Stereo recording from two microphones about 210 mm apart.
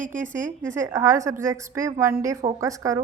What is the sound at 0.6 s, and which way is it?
A woman's voice, 15° right (ahead or behind).